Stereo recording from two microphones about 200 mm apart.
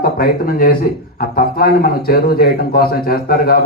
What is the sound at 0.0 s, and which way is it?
A man's voice, 45° left (ahead or behind).